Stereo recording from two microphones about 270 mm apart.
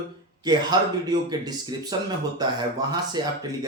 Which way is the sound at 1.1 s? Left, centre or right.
Centre.